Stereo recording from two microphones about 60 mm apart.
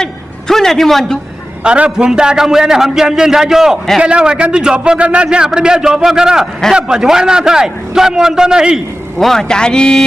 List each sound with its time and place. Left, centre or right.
0.0 s a man's voice: centre
1.6 s a man's voice: centre
9.2 s speech: centre